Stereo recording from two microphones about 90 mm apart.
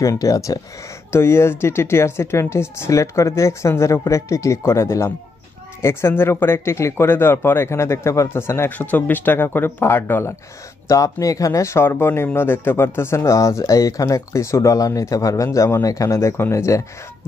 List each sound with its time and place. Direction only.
0.0 s speech: 40° left (ahead or behind); by 10.3 s 25° left (ahead or behind)
10.9 s speech: 40° left (ahead or behind)